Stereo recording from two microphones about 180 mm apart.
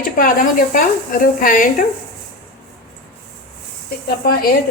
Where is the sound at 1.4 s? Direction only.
50° left (ahead or behind).